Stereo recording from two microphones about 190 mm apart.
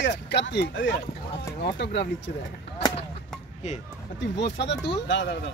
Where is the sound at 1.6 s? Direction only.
60° left (ahead or behind).